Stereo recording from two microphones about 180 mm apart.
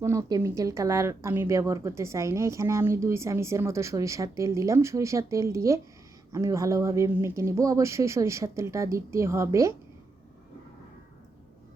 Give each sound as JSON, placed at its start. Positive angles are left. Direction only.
{"t": 0.0, "sound": "speech", "side_deg": -15}